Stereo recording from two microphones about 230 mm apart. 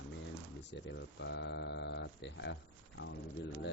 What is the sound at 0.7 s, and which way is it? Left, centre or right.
Speech, left.